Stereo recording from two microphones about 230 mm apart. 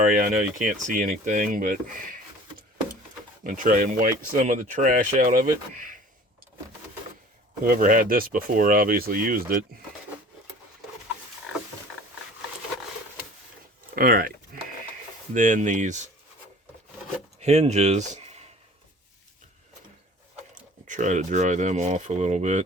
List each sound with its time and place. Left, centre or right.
0.1 s speech: right
3.4 s speech: right
7.6 s speech: right
13.9 s a sound: right
15.3 s speech: right
17.4 s speech: right
20.8 s speech: right